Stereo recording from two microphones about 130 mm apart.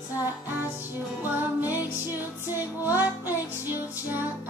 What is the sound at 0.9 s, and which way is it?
Music, 15° right (ahead or behind).